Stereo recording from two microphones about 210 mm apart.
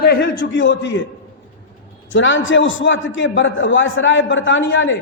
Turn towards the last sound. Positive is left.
turn(degrees=65)  # may be behind; listen again after turning